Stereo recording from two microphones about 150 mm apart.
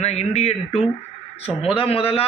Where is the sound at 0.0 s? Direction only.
45° left (ahead or behind).